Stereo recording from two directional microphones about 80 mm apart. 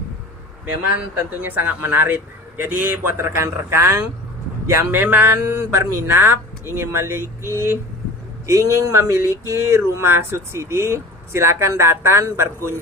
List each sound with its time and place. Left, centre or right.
1.4 s a man's voice: right